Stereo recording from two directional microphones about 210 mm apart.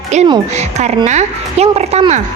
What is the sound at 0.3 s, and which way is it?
Speech, 30° right (ahead or behind).